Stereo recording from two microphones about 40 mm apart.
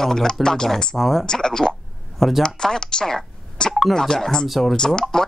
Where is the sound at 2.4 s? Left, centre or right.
Centre.